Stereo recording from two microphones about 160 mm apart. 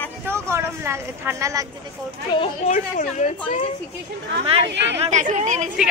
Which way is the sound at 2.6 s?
50° left (ahead or behind).